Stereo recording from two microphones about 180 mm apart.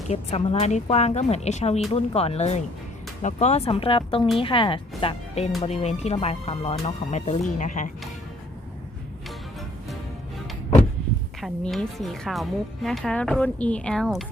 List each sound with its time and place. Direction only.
0.1 s speech: 35° left (ahead or behind)
11.3 s a woman's voice: centre (ahead or behind)